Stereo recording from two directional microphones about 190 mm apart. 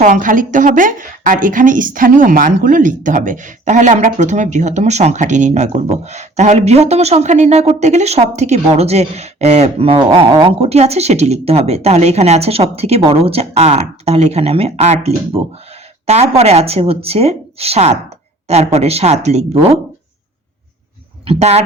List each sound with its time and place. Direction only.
0.0 s a woman's voice: 45° right (ahead or behind)
21.2 s a woman's voice: 35° right (ahead or behind)